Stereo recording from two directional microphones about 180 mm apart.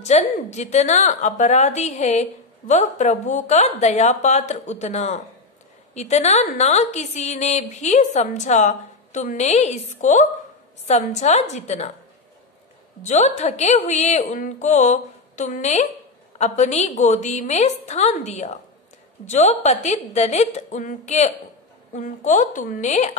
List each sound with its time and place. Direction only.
0.0 s a woman's voice: 40° left (ahead or behind)
13.0 s a woman's voice: 40° left (ahead or behind)